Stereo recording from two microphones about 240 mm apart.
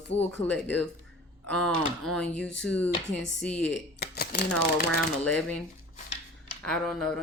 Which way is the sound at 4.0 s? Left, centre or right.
Left.